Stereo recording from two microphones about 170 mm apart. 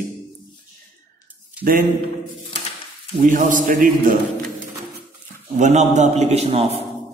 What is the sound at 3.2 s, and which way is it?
Speech, 50° right (ahead or behind).